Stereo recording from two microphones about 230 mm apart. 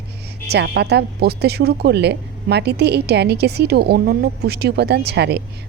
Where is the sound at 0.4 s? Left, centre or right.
Right.